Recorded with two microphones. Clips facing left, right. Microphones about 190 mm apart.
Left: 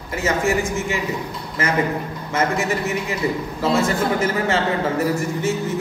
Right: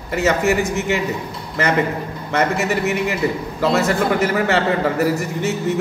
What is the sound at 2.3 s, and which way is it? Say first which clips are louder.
A man's voice: right 2 dB; 65° right (ahead or behind).